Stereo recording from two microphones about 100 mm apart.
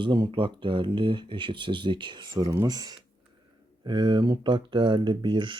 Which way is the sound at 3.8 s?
50° right (ahead or behind).